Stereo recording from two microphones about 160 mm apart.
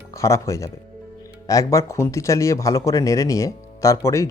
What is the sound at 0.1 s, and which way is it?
A man's voice, 20° left (ahead or behind).